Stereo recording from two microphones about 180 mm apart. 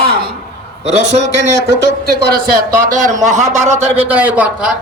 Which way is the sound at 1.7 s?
60° right (ahead or behind).